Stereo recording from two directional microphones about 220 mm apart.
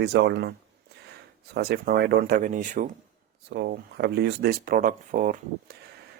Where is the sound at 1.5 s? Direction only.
45° right (ahead or behind).